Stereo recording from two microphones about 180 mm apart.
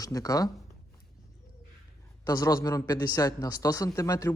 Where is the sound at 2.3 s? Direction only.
20° left (ahead or behind).